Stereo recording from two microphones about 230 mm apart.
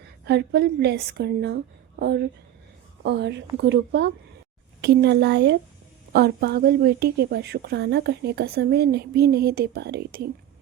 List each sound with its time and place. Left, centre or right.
0.0 s speech: right